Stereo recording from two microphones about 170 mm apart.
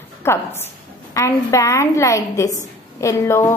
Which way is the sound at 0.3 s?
15° left (ahead or behind).